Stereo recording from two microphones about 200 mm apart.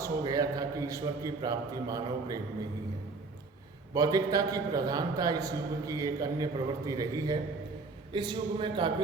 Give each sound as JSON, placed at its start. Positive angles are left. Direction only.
{"t": 0.0, "sound": "a man's voice", "side_deg": -20}
{"t": 3.9, "sound": "a man's voice", "side_deg": -20}